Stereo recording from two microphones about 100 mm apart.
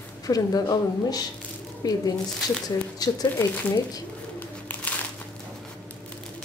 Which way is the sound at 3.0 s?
40° left (ahead or behind).